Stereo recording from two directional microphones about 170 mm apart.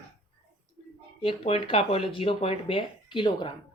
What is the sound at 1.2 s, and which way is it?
Speech, 35° left (ahead or behind).